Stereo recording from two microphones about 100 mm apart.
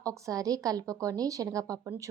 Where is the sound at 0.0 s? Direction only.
35° right (ahead or behind).